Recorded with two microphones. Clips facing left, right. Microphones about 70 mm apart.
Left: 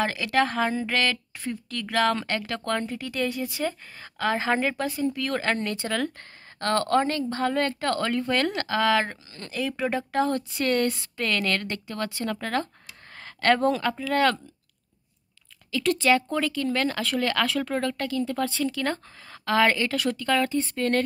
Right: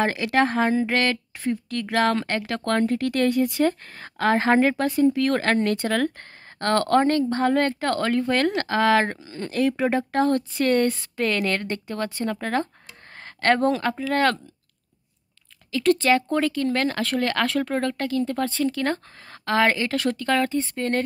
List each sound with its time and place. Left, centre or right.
0.0 s speech: right
10.7 s speech: right
12.8 s a sound: right
15.8 s speech: right
20.0 s speech: right